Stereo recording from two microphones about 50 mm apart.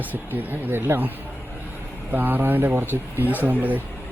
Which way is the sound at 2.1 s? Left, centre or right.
Right.